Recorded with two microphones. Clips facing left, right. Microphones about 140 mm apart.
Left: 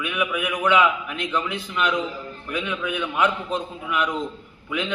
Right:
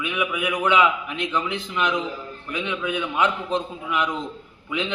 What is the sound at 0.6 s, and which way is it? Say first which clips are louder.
A man's voice: left 1 dB; 20° right (ahead or behind).